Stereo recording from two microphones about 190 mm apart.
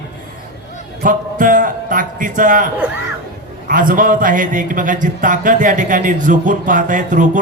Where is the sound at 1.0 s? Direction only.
45° right (ahead or behind).